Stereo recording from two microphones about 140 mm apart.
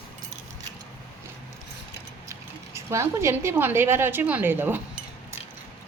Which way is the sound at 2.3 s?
20° right (ahead or behind).